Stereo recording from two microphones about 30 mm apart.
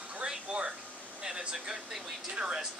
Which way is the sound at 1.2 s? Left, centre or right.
Right.